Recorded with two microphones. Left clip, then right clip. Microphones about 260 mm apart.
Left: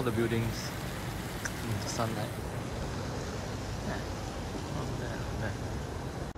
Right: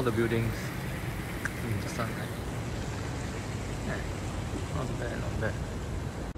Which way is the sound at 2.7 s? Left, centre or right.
Right.